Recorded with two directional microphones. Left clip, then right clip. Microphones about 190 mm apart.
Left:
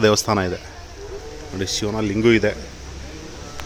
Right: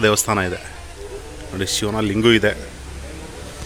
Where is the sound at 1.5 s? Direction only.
Centre (ahead or behind).